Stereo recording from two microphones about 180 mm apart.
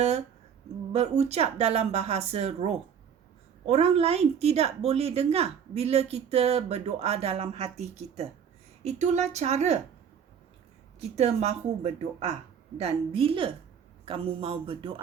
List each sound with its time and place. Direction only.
0.9 s a woman's voice: 35° right (ahead or behind)
11.1 s a woman's voice: 35° right (ahead or behind)